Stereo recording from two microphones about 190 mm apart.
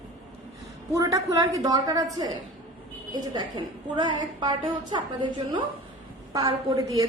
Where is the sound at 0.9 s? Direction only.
15° right (ahead or behind).